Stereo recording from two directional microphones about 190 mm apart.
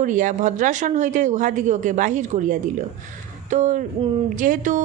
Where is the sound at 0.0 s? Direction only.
40° right (ahead or behind).